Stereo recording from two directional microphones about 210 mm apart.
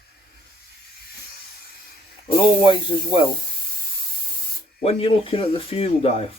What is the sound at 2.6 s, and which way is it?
Speech, 25° left (ahead or behind).